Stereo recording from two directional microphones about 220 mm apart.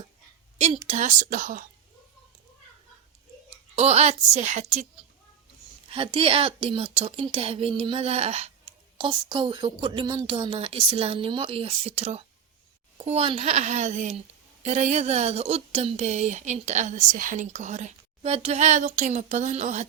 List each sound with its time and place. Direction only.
0.9 s a woman's voice: 35° right (ahead or behind)
3.8 s a woman's voice: 30° right (ahead or behind)
5.9 s a woman's voice: 25° right (ahead or behind)